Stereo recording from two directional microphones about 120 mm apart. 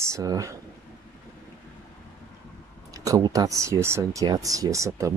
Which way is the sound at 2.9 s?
30° right (ahead or behind).